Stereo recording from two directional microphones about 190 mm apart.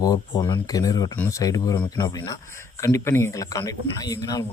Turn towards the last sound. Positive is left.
turn(degrees=20)  # may be behind; listen again after turning